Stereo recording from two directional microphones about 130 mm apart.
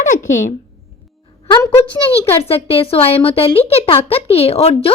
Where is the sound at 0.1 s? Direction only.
80° left.